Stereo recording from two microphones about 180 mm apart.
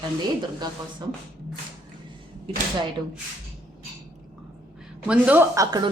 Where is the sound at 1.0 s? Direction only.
25° right (ahead or behind).